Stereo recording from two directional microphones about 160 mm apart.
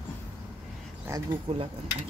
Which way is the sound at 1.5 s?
35° right (ahead or behind).